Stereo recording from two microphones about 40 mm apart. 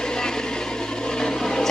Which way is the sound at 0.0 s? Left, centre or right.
Centre.